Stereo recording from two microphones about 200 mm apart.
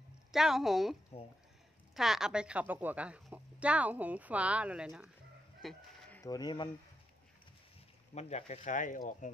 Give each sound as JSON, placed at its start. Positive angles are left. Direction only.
{"t": 0.3, "sound": "a woman's voice", "side_deg": 0}
{"t": 2.0, "sound": "a woman's voice", "side_deg": 0}
{"t": 8.1, "sound": "speech", "side_deg": 35}